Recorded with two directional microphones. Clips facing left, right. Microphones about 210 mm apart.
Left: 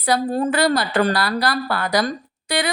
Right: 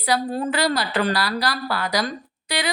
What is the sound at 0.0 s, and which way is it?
Speech, 50° left (ahead or behind).